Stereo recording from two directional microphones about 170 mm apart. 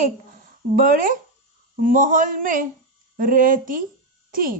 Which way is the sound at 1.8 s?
50° right (ahead or behind).